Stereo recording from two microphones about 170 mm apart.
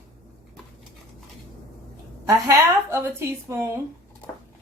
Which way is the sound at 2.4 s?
15° right (ahead or behind).